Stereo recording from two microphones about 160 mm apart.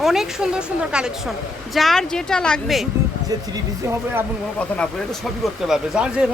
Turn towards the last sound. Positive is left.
turn(degrees=-5)  # may be behind; listen again after turning